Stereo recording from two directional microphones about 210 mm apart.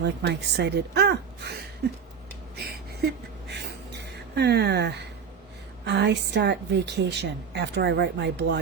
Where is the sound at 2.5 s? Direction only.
50° right (ahead or behind).